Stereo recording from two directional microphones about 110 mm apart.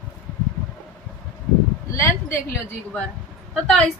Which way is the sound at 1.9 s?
25° left (ahead or behind).